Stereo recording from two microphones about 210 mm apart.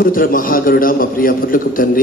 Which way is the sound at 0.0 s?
40° left (ahead or behind).